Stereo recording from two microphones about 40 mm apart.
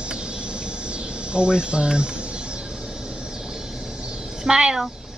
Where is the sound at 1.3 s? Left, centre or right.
Right.